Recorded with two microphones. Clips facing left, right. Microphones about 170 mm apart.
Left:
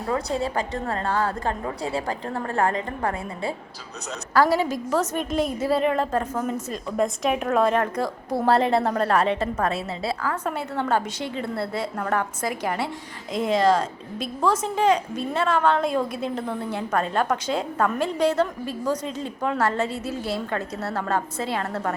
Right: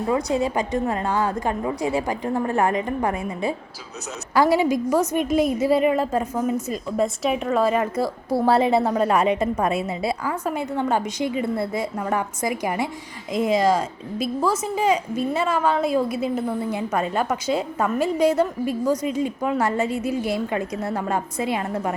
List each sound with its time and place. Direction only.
0.1 s a woman's voice: 15° right (ahead or behind)